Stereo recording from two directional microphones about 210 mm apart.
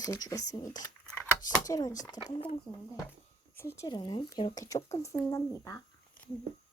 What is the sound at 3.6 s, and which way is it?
Speech, 10° left (ahead or behind).